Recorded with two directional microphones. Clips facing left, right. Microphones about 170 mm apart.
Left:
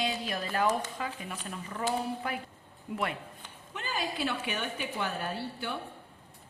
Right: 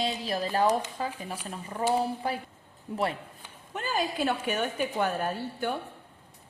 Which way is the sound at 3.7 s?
45° right (ahead or behind).